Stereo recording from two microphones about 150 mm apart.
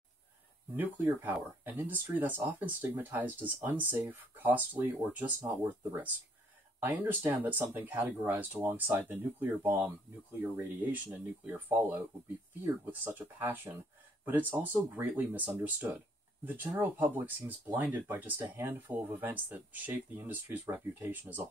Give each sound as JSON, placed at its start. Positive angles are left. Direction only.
{"t": 0.7, "sound": "speech", "side_deg": -15}